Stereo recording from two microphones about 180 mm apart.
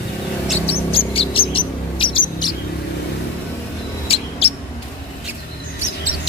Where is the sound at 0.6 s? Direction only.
30° left (ahead or behind).